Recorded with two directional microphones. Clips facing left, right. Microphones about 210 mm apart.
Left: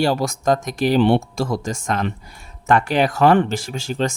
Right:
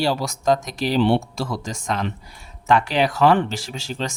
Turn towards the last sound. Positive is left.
turn(degrees=50)  # may be behind; listen again after turning